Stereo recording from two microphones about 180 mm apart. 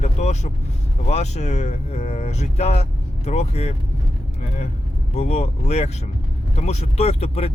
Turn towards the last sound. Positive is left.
turn(degrees=35)  # may be behind; listen again after turning